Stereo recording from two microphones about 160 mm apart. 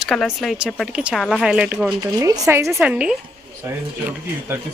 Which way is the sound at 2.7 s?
5° right (ahead or behind).